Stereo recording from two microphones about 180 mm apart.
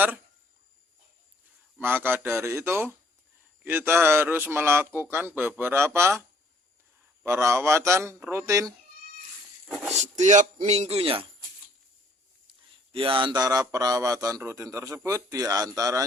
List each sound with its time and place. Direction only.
1.8 s a man's voice: 10° right (ahead or behind)
7.3 s a man's voice: 15° right (ahead or behind)
9.6 s a sound: 5° right (ahead or behind)
9.9 s speech: 40° right (ahead or behind)
12.5 s speech: 30° right (ahead or behind)